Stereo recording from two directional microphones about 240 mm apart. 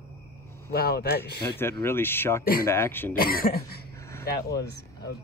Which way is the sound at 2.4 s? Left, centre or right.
Left.